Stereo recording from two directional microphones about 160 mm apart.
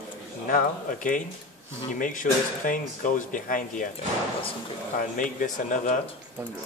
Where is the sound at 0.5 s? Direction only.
60° left (ahead or behind).